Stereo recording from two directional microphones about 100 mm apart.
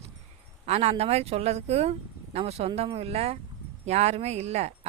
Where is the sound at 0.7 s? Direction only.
90° right.